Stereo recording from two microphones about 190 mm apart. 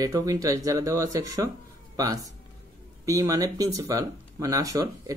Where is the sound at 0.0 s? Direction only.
20° right (ahead or behind).